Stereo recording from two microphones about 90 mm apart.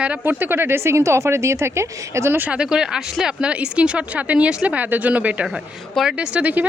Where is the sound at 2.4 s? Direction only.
10° right (ahead or behind).